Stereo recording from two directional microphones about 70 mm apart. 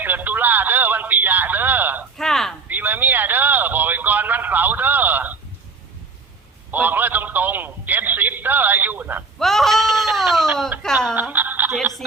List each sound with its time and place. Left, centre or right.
0.0 s radio: right
2.1 s a sound: centre
2.6 s a sound: right
6.7 s telephone: right
9.4 s goat: centre
11.1 s music: right